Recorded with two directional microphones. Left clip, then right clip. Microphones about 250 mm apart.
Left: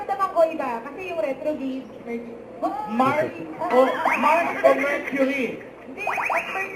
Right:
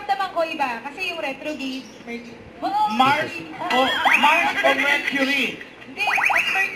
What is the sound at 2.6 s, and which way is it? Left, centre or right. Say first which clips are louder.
A man's voice: right 5 dB; centre.